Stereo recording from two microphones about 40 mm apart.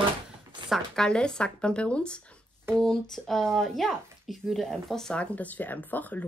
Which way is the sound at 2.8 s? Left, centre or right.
Centre.